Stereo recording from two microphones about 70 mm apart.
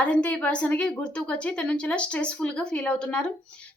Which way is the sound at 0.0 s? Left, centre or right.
Centre.